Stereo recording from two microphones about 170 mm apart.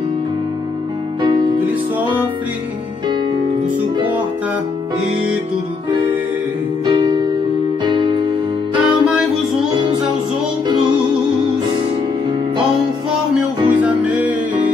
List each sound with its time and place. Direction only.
1.2 s music: 25° right (ahead or behind)
6.9 s music: 25° right (ahead or behind)
8.7 s music: 5° right (ahead or behind)
13.7 s music: 10° right (ahead or behind)